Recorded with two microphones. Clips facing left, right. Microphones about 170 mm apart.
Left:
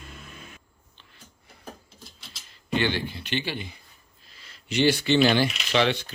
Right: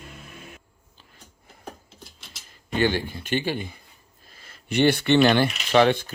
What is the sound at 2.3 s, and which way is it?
Speech, 45° right (ahead or behind).